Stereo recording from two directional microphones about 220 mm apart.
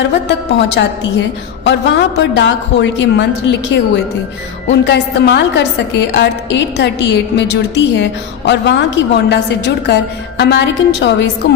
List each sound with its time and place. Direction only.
0.8 s a woman's voice: 55° left (ahead or behind)